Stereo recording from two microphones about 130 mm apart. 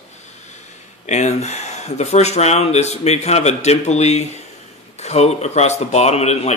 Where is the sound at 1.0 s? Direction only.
60° left (ahead or behind).